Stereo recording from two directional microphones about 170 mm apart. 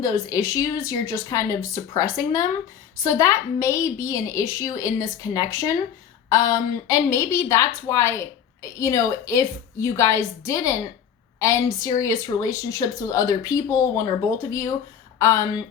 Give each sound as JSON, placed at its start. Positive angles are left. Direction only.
{"t": 0.0, "sound": "a woman's voice", "side_deg": 20}